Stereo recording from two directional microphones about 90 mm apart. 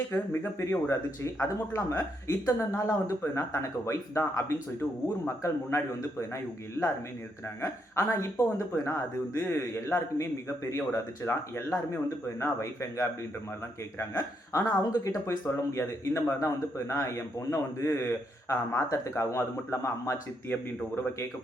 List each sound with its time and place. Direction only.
0.6 s a man's voice: 30° left (ahead or behind)
20.5 s a man's voice: 25° left (ahead or behind)